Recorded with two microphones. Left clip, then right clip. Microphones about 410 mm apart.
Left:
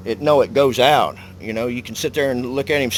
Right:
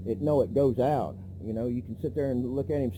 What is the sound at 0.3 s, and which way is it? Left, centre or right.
Speech, centre.